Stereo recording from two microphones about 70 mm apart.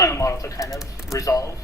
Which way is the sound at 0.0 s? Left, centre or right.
Left.